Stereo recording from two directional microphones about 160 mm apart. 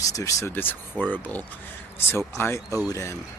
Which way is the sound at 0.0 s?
20° left (ahead or behind).